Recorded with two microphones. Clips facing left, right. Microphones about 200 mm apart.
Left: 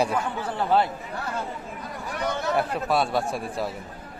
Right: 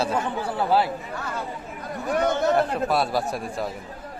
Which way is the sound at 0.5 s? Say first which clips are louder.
Even; 5° right (ahead or behind).